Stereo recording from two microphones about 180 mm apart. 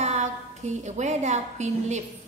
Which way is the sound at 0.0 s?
40° right (ahead or behind).